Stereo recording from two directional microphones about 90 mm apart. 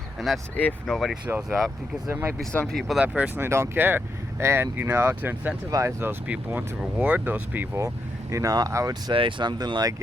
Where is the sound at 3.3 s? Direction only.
30° right (ahead or behind).